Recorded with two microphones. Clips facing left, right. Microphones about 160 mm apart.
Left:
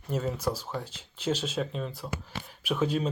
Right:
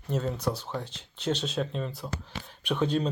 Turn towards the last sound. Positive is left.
turn(degrees=5)  # may be behind; listen again after turning